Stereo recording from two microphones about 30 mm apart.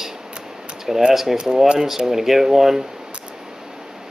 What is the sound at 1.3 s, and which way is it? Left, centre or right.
Speech, right.